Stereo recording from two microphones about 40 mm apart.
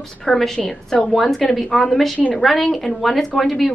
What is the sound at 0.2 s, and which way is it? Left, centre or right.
A woman's voice, centre.